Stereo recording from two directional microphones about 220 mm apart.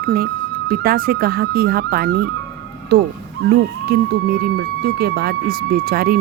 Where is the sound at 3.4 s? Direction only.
45° right (ahead or behind).